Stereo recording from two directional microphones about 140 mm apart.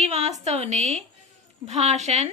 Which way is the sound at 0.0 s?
50° right (ahead or behind).